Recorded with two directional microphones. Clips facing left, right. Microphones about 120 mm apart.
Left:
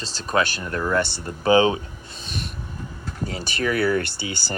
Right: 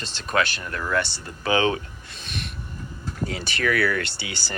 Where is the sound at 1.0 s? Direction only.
50° left (ahead or behind).